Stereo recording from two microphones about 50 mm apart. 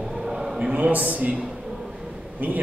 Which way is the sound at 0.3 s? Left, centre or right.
Centre.